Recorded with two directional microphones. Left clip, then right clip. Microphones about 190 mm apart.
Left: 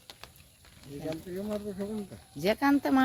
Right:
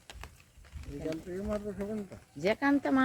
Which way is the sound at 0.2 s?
5° left (ahead or behind).